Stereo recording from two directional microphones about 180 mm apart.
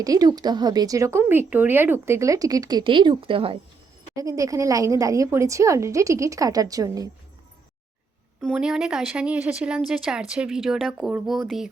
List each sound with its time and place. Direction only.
0.0 s speech: 20° right (ahead or behind)
4.1 s a woman's voice: 20° right (ahead or behind)
8.4 s speech: centre (ahead or behind)